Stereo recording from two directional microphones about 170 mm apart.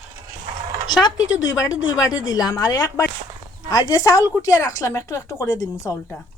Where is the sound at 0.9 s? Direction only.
25° left (ahead or behind).